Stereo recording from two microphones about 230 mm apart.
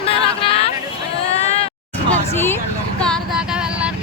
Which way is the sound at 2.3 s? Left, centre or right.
Centre.